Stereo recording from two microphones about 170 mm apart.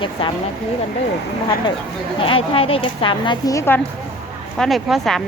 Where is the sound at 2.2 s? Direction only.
30° left (ahead or behind); by 3.8 s 15° left (ahead or behind).